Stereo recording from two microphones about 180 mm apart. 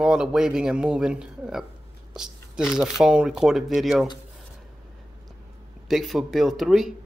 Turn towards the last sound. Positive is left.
turn(degrees=0)  # may be behind; listen again after turning